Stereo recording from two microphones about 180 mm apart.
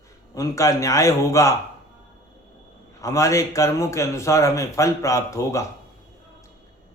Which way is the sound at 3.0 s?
15° left (ahead or behind).